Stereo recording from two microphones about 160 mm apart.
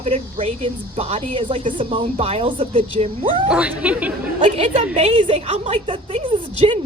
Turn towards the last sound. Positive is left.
turn(degrees=-30)  # may be behind; listen again after turning